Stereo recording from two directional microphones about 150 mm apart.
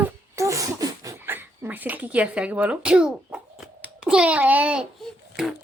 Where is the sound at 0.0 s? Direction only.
20° right (ahead or behind).